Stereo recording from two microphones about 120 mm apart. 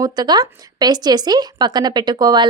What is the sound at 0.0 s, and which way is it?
Speech, 35° right (ahead or behind).